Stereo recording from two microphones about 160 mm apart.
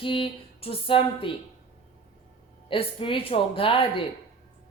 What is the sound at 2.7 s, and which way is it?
A woman's voice, 35° left (ahead or behind).